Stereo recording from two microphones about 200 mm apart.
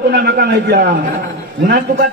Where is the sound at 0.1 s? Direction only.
55° right (ahead or behind).